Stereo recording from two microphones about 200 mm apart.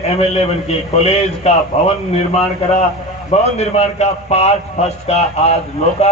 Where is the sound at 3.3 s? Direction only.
30° left (ahead or behind).